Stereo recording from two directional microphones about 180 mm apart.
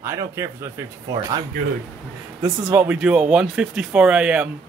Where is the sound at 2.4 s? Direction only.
15° right (ahead or behind).